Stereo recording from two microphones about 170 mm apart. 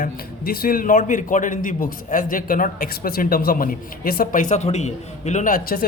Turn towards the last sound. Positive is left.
turn(degrees=55)  # may be behind; listen again after turning